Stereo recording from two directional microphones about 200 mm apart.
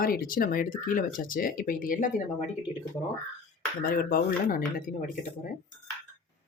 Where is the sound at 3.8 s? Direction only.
45° left (ahead or behind).